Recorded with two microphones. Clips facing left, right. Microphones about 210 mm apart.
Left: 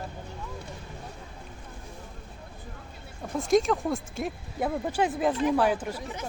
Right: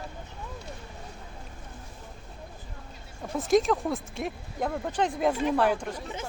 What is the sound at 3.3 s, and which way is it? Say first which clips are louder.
Speech: even; centre (ahead or behind).